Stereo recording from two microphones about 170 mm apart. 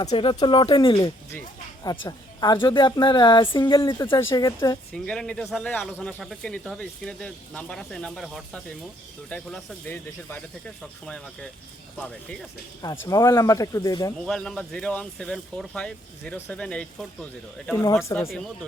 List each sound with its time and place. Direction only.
0.1 s a woman's voice: 30° left (ahead or behind)
4.9 s speech: 5° left (ahead or behind)
12.8 s a woman's voice: 20° left (ahead or behind)
14.3 s speech: 5° left (ahead or behind)
18.3 s speech: centre (ahead or behind)